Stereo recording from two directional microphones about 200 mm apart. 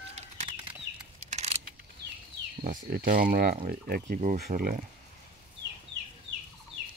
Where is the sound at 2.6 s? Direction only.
45° right (ahead or behind).